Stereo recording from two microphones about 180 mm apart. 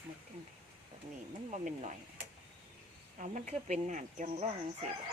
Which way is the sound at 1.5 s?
45° right (ahead or behind).